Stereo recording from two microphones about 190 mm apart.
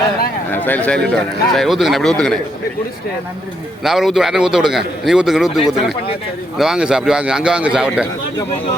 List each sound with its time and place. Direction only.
0.5 s a man's voice: 10° left (ahead or behind)
3.8 s a man's voice: centre (ahead or behind)